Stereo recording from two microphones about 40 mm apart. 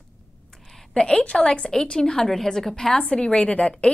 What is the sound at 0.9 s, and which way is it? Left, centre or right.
A woman's voice, centre.